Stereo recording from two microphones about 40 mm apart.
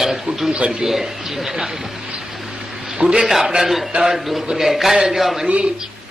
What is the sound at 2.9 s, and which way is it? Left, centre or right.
A man's voice, centre.